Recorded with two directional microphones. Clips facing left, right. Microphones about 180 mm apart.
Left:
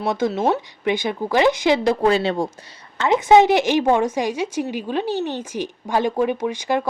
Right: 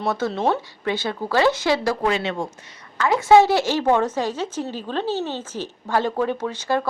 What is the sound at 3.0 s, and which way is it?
A woman's voice, 20° left (ahead or behind).